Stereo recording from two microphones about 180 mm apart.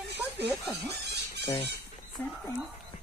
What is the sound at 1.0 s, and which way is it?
Squeal, 70° right (ahead or behind).